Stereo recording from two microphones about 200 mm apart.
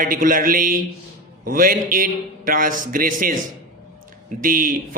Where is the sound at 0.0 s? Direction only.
45° right (ahead or behind).